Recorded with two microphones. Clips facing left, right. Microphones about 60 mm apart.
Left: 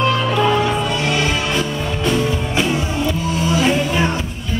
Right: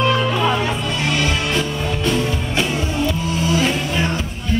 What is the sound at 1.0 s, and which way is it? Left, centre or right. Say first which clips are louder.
Music: left 1 dB; centre.